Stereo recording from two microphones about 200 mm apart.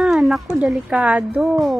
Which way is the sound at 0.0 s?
Centre (ahead or behind).